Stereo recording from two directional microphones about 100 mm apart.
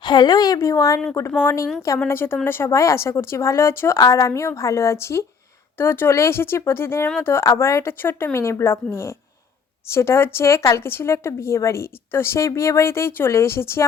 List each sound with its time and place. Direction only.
0.0 s a woman's voice: 50° left (ahead or behind); by 8.8 s 25° left (ahead or behind)
9.9 s a woman's voice: 25° left (ahead or behind)